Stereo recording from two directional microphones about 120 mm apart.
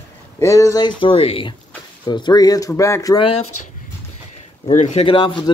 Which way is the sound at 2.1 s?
35° left (ahead or behind).